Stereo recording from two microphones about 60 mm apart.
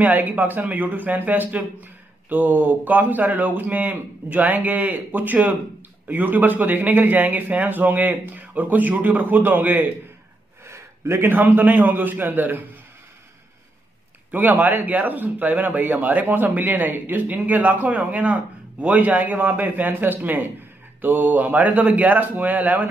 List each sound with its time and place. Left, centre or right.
0.0 s a man's voice: right
10.6 s a man's voice: right
14.3 s a man's voice: right